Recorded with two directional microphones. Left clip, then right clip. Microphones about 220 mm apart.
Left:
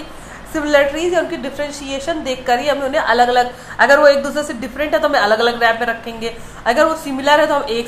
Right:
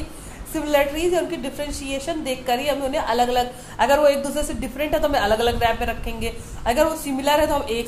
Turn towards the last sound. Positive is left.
turn(degrees=5)  # may be behind; listen again after turning